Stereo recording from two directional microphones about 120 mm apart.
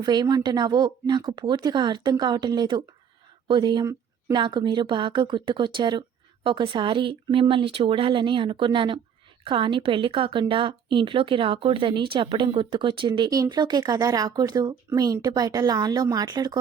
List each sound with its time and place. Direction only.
0.0 s a woman's voice: 35° right (ahead or behind)